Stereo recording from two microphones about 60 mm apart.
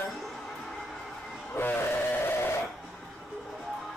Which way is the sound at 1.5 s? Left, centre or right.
Left.